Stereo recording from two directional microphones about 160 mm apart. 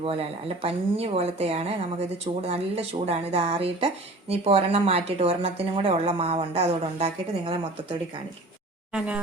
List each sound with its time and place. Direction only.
0.0 s speech: 35° right (ahead or behind)
8.9 s speech: 5° right (ahead or behind)